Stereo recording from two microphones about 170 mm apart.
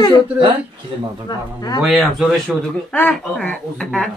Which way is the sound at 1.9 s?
Centre (ahead or behind).